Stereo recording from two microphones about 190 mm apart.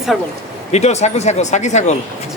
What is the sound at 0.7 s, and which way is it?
Speech, 35° left (ahead or behind).